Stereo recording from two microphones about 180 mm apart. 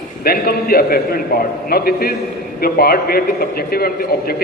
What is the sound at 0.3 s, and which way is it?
A man's voice, 60° left (ahead or behind).